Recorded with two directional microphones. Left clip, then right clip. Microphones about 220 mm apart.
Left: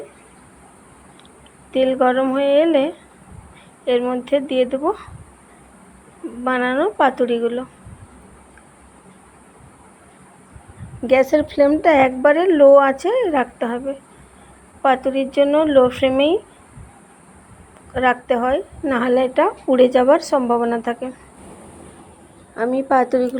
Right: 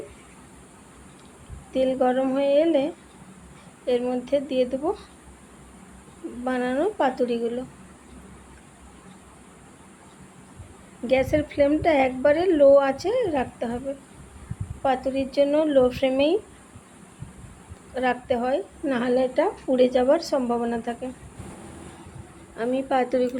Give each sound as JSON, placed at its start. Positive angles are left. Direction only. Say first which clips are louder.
{"t": 1.7, "sound": "a woman's voice", "louder": "left 6 dB", "side_deg": 15}
{"t": 6.4, "sound": "a woman's voice", "louder": "left 6 dB", "side_deg": 10}
{"t": 11.0, "sound": "a woman's voice", "louder": "left 7 dB", "side_deg": 20}
{"t": 17.9, "sound": "a woman's voice", "louder": "left 7 dB", "side_deg": 15}
{"t": 22.5, "sound": "a woman's voice", "louder": "left 7 dB", "side_deg": 15}